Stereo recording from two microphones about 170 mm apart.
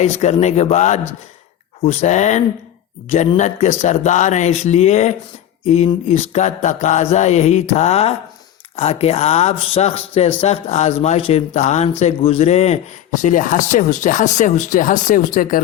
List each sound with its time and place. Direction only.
0.0 s a man's voice: 40° left (ahead or behind)